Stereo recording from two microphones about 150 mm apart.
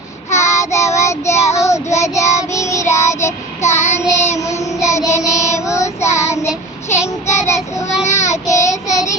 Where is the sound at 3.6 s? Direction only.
50° left (ahead or behind).